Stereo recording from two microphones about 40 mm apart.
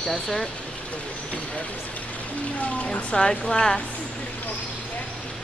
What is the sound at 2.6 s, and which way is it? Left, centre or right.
Speech, left.